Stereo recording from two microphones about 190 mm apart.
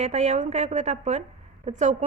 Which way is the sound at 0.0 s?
35° right (ahead or behind).